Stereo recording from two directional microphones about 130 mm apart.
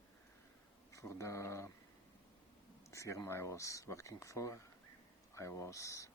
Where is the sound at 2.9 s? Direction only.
25° left (ahead or behind).